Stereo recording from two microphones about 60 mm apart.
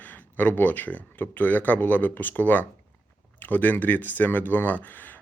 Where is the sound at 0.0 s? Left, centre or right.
Left.